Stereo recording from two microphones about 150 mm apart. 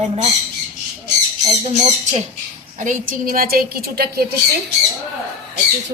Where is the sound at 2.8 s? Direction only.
60° right (ahead or behind); by 4.2 s 90° right.